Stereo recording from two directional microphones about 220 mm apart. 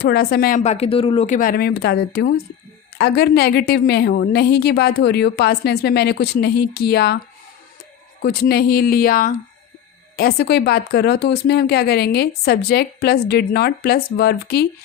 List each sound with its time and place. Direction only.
0.0 s speech: 45° left (ahead or behind)
8.2 s speech: 45° left (ahead or behind)